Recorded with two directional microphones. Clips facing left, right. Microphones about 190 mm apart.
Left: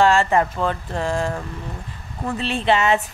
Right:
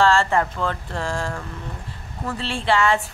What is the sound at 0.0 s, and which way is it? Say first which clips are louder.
A woman's voice: left 2 dB; 15° left (ahead or behind).